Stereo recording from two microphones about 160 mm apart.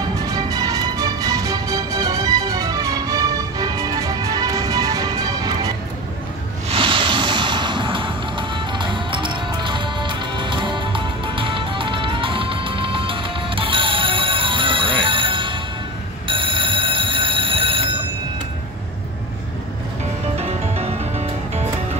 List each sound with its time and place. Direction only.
0.0 s music: 25° right (ahead or behind)
6.7 s music: 35° right (ahead or behind)
16.3 s train: 30° right (ahead or behind)
20.3 s music: 40° right (ahead or behind)